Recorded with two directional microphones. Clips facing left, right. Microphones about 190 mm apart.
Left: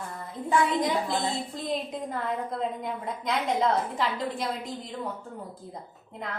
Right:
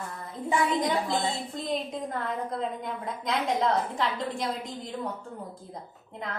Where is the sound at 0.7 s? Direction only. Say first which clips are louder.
Even; centre (ahead or behind).